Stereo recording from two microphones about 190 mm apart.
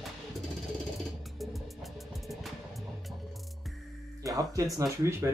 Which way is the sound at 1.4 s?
Centre (ahead or behind).